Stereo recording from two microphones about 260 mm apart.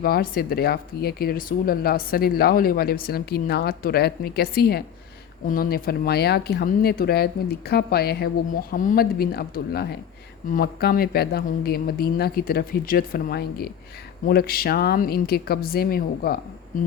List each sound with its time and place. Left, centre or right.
0.0 s speech: left